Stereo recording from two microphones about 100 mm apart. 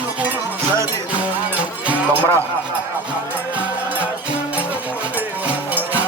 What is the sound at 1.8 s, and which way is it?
Music, 20° right (ahead or behind).